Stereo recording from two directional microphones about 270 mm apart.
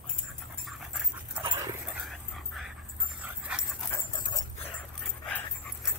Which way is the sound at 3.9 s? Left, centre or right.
Centre.